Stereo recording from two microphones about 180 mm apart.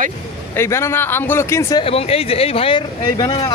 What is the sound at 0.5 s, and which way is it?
A man's voice, 15° left (ahead or behind).